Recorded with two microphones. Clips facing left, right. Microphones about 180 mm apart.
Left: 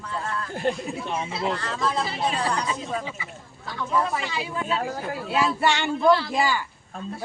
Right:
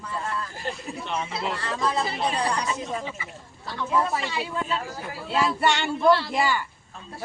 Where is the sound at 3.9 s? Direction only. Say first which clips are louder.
Even; 5° right (ahead or behind).